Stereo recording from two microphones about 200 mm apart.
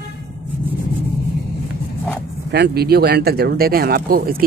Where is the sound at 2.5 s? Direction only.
55° right (ahead or behind).